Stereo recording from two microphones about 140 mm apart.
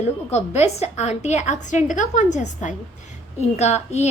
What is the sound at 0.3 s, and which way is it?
A woman's voice, 50° left (ahead or behind).